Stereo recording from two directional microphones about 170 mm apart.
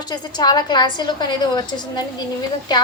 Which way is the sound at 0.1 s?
25° left (ahead or behind).